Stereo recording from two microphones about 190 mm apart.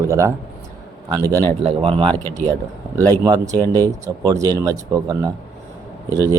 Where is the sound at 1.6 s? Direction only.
30° right (ahead or behind).